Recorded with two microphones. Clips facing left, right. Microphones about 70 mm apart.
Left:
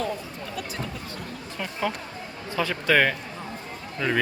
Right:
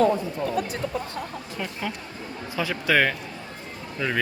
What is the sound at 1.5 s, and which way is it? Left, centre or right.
Speech, centre.